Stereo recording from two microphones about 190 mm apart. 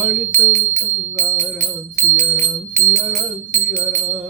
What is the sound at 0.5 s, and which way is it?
Music, 35° right (ahead or behind).